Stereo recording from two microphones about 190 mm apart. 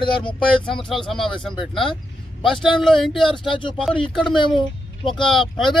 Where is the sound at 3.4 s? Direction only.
25° left (ahead or behind).